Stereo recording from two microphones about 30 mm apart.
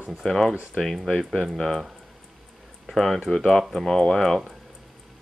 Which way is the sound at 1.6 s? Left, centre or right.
Centre.